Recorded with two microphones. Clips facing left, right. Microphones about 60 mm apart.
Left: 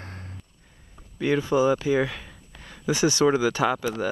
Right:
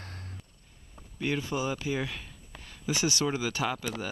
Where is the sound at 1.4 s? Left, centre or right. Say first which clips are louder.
Left 10 dB; left.